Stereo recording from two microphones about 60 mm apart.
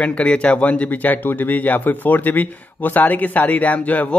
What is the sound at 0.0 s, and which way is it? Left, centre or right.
Speech, centre.